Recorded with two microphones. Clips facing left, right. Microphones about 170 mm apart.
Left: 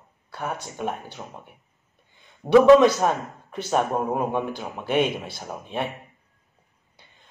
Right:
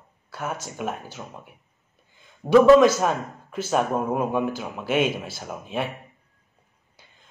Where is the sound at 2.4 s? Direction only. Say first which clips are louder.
Even; 5° left (ahead or behind).